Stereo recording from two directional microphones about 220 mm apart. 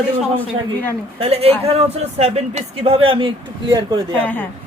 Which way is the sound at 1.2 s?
25° right (ahead or behind).